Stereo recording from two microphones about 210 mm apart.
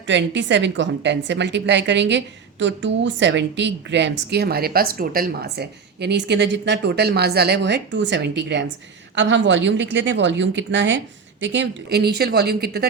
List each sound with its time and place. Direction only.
0.1 s a woman's voice: 60° right (ahead or behind)